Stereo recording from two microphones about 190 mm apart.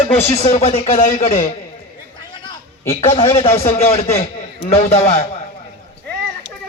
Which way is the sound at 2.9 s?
30° left (ahead or behind).